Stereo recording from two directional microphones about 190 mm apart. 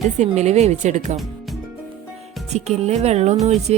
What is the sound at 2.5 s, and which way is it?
Speech, 35° right (ahead or behind).